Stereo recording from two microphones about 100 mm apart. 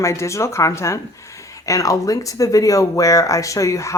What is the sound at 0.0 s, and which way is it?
Speech, 30° left (ahead or behind).